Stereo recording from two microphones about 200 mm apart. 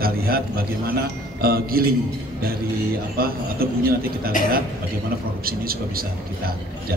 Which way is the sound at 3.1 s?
50° right (ahead or behind).